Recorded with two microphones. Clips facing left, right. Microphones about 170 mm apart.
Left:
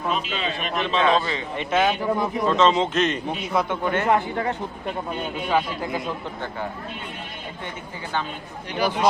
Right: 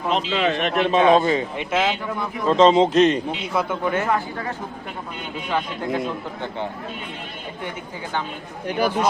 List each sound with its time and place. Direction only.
0.1 s a man's voice: 85° right; by 0.9 s 70° right (ahead or behind)
0.9 s a man's voice: 15° right (ahead or behind)
1.2 s speech: 45° right (ahead or behind)
1.5 s a man's voice: centre (ahead or behind)
2.5 s speech: 35° right (ahead or behind)
3.5 s a man's voice: centre (ahead or behind)
5.5 s a man's voice: 5° left (ahead or behind)
8.6 s speech: 50° right (ahead or behind)